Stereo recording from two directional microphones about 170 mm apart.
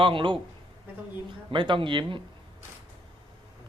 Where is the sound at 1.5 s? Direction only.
30° right (ahead or behind).